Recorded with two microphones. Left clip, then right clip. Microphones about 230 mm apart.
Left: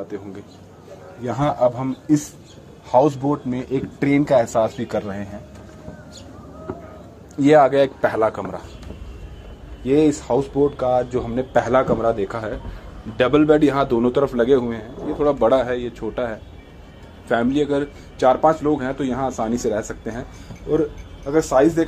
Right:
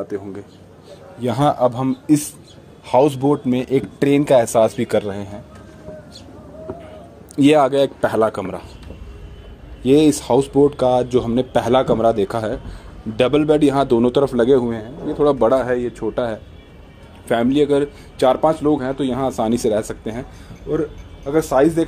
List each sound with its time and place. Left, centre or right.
0.1 s speech: right
2.9 s speech: right
7.3 s speech: right
9.8 s a man's voice: right
21.2 s a man's voice: right